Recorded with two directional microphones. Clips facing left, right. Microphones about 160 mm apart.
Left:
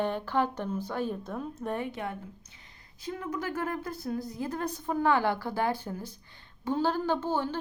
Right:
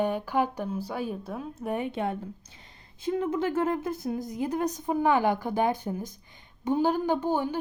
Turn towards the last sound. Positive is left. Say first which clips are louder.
# right 3 dB
turn(degrees=-15)  # may be behind; listen again after turning